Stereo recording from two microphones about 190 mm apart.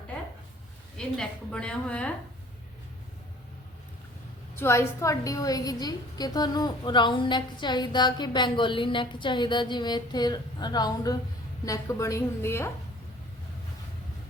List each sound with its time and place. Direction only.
0.9 s a woman's voice: 5° left (ahead or behind)
4.6 s a woman's voice: 15° left (ahead or behind)